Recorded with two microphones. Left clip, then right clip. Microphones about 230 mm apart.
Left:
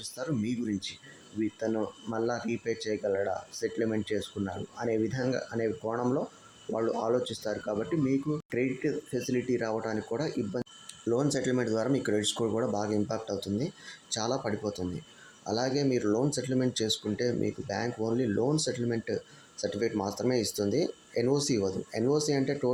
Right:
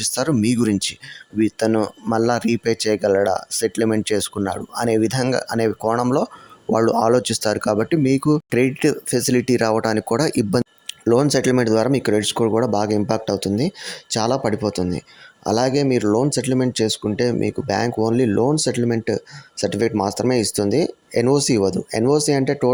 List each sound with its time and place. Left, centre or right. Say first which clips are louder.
0.0 s speech: right 14 dB; right